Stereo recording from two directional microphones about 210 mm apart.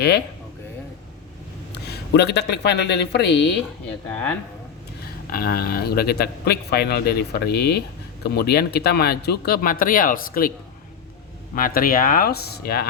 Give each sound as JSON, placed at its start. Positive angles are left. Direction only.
{"t": 1.7, "sound": "speech", "side_deg": 50}
{"t": 5.3, "sound": "a man's voice", "side_deg": 45}
{"t": 11.5, "sound": "a man's voice", "side_deg": 40}